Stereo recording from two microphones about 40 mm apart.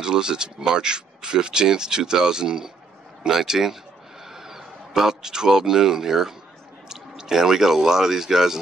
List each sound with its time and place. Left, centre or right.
0.0 s a man's voice: centre